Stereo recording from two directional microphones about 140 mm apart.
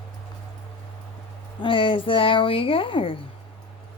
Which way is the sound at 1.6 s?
40° left (ahead or behind).